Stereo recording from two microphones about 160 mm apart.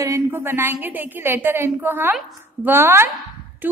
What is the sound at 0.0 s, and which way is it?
A woman's voice, 15° right (ahead or behind).